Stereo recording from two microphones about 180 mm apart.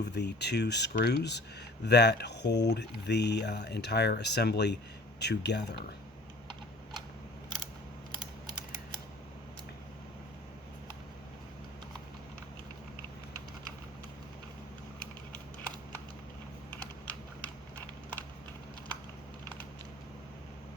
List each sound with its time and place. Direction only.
0.0 s speech: 70° left (ahead or behind)
16.8 s typing: 10° left (ahead or behind)